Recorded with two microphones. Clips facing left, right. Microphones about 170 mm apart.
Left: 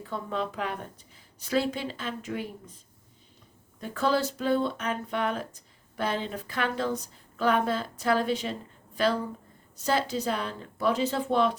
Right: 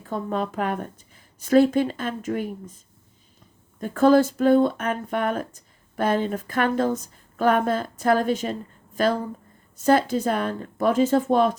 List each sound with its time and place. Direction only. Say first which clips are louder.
0.0 s speech: right 5 dB; 45° right (ahead or behind)